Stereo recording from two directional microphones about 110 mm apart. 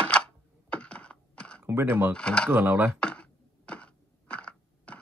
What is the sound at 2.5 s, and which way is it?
Speech, 20° right (ahead or behind).